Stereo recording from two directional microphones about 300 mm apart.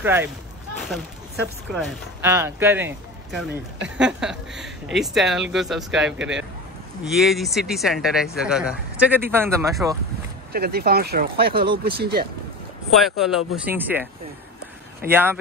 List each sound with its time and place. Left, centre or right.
0.0 s speech: centre
2.2 s speech: centre
10.5 s speech: right
12.9 s speech: centre
15.0 s speech: centre